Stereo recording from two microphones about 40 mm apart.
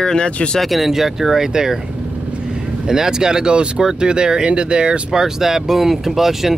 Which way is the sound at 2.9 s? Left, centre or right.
Centre.